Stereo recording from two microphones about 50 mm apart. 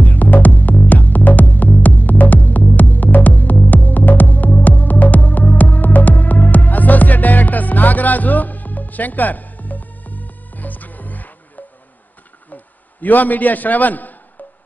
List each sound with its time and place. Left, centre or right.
0.0 s music: left
12.5 s a man's voice: left